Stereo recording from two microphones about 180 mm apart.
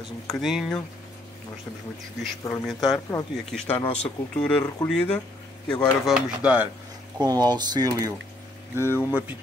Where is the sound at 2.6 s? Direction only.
Centre (ahead or behind).